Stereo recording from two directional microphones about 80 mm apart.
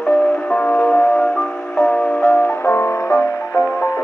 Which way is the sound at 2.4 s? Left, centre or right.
Left.